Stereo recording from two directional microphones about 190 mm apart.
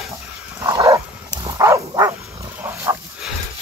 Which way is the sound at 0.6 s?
20° right (ahead or behind).